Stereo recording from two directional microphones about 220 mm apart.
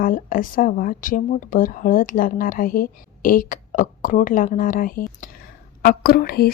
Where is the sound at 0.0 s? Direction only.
40° left (ahead or behind).